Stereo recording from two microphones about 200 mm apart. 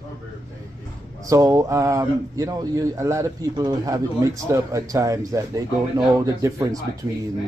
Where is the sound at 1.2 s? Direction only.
15° right (ahead or behind).